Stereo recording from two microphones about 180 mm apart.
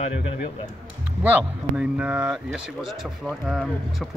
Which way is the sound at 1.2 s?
5° right (ahead or behind).